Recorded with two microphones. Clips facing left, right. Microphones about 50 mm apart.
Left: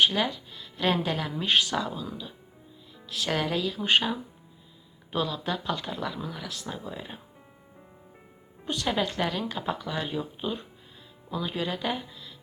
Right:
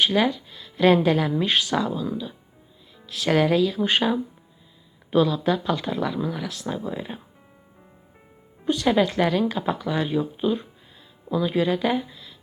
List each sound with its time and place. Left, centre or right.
0.0 s speech: right
3.1 s speech: right
5.2 s speech: right
8.6 s speech: right